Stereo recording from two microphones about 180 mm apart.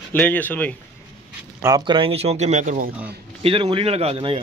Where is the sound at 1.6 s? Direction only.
20° right (ahead or behind); by 2.9 s 45° right (ahead or behind).